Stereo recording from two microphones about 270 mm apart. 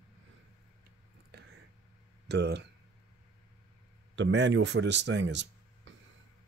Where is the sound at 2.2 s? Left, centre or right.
Right.